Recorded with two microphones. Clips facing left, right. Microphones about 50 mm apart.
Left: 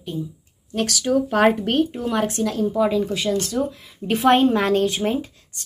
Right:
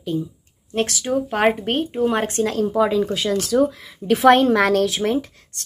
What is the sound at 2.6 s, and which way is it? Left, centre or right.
Speech, right.